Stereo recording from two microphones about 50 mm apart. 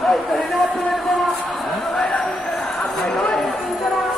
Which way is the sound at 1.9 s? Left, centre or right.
Centre.